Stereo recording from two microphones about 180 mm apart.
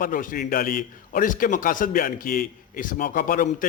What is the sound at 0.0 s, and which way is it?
A man's voice, 50° left (ahead or behind).